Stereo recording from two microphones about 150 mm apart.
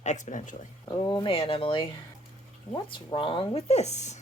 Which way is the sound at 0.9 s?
30° left (ahead or behind).